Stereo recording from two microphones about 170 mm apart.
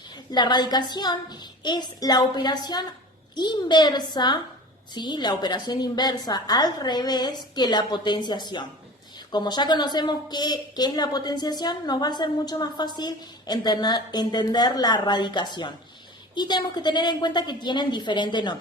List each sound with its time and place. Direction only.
0.1 s a woman's voice: 25° left (ahead or behind)